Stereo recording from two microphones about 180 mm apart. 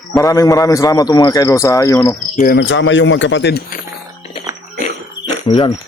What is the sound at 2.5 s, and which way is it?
A man's voice, 85° left.